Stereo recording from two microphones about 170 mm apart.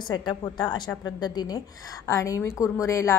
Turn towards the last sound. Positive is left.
turn(degrees=20)  # may be behind; listen again after turning